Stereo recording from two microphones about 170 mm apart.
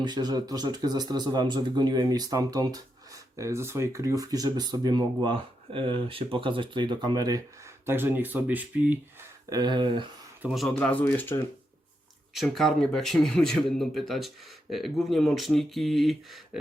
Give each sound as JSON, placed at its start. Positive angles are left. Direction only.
{"t": 0.0, "sound": "speech", "side_deg": -25}
{"t": 7.9, "sound": "speech", "side_deg": -10}
{"t": 9.5, "sound": "speech", "side_deg": -25}
{"t": 10.4, "sound": "speech", "side_deg": 0}